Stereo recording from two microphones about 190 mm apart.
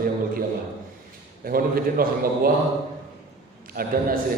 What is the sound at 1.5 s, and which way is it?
A man's voice, 50° right (ahead or behind).